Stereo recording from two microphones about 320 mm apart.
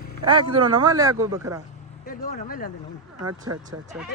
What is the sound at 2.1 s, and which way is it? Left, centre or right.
Speech, left.